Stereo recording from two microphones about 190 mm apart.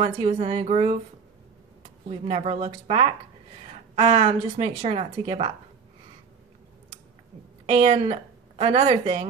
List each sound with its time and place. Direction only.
0.0 s a woman's voice: 30° right (ahead or behind)
2.0 s a woman's voice: 30° right (ahead or behind)
7.6 s speech: 30° right (ahead or behind)